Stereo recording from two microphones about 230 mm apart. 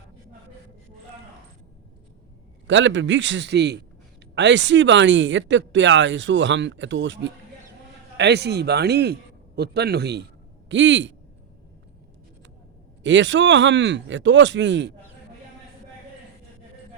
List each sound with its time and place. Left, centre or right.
2.6 s speech: right
13.0 s speech: right